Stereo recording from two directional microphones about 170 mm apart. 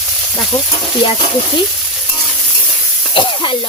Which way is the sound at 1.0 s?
30° left (ahead or behind).